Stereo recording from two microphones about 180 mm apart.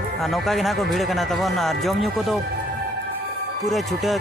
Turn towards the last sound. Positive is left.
turn(degrees=0)  # may be behind; listen again after turning